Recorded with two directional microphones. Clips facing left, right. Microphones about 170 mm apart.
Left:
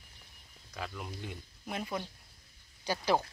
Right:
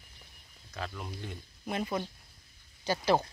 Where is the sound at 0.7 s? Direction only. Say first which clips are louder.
Right 1 dB; 5° left (ahead or behind).